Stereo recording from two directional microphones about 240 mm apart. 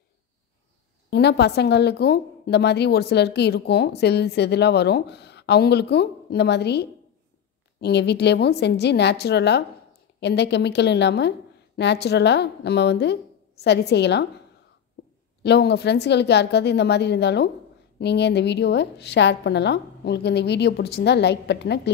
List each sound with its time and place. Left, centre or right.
1.1 s a woman's voice: left
15.4 s a woman's voice: left